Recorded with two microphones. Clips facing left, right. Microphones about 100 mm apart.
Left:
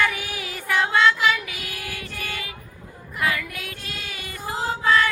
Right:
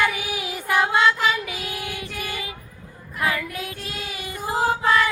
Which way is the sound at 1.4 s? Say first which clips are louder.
Right 4 dB; 25° right (ahead or behind).